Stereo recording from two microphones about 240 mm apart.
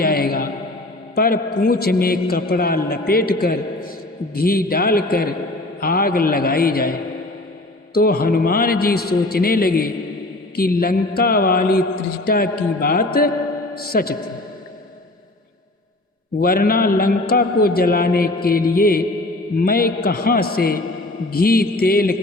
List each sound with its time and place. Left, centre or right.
0.0 s a sound: left
1.1 s a man's voice: left
7.9 s a man's voice: left
16.4 s a man's voice: left